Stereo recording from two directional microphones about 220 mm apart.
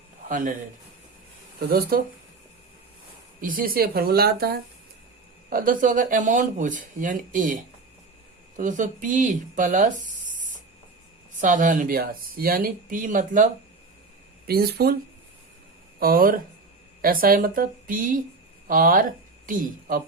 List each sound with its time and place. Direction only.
0.3 s speech: 35° right (ahead or behind)
1.5 s speech: 45° right (ahead or behind)
3.4 s speech: 40° right (ahead or behind)
16.0 s speech: 40° right (ahead or behind)